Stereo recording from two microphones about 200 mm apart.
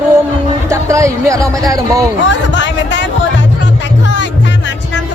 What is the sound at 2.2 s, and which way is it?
Music, 65° left (ahead or behind).